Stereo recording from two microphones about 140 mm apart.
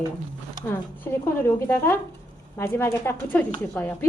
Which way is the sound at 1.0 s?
15° left (ahead or behind).